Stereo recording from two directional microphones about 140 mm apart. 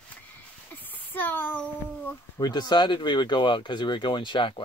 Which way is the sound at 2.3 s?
30° left (ahead or behind).